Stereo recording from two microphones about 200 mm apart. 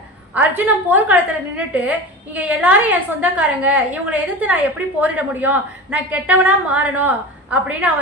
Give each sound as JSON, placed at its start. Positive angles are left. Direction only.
{"t": 0.3, "sound": "a woman's voice", "side_deg": -10}